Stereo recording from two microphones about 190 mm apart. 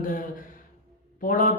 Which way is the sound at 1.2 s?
45° left (ahead or behind).